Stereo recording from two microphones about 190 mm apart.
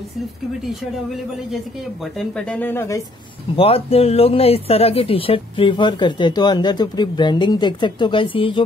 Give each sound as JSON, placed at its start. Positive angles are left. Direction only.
{"t": 2.1, "sound": "speech", "side_deg": 5}
{"t": 3.5, "sound": "speech", "side_deg": 30}